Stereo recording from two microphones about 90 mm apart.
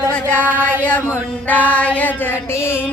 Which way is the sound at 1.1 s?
20° left (ahead or behind).